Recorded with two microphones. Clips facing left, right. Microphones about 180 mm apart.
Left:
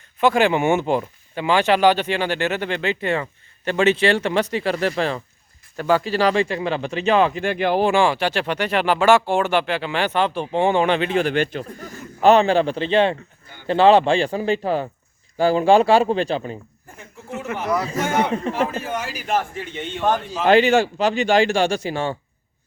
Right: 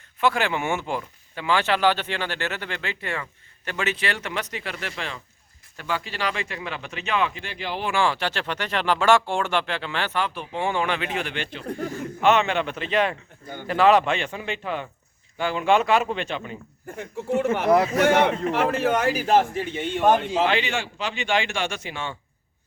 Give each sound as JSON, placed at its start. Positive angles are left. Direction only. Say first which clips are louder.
{"t": 0.2, "sound": "speech", "louder": "left 6 dB", "side_deg": 15}
{"t": 7.9, "sound": "speech", "louder": "left 6 dB", "side_deg": 15}
{"t": 17.0, "sound": "a man's voice", "louder": "right 8 dB", "side_deg": -65}
{"t": 17.6, "sound": "a man's voice", "louder": "right 3 dB", "side_deg": -55}
{"t": 17.9, "sound": "a man's voice", "louder": "right 2 dB", "side_deg": -70}
{"t": 20.0, "sound": "a man's voice", "louder": "right 2 dB", "side_deg": -15}
{"t": 20.5, "sound": "speech", "louder": "left 11 dB", "side_deg": 45}